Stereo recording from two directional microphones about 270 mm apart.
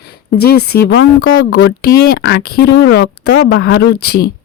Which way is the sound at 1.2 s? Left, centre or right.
Left.